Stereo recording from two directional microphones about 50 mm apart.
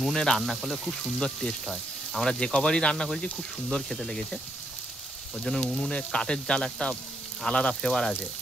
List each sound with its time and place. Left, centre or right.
0.0 s speech: centre